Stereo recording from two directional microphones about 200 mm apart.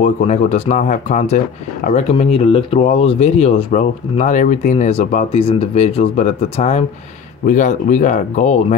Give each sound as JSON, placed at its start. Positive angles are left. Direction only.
{"t": 0.0, "sound": "speech", "side_deg": 35}